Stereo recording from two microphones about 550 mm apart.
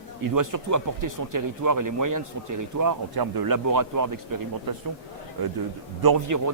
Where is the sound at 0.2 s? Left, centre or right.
Right.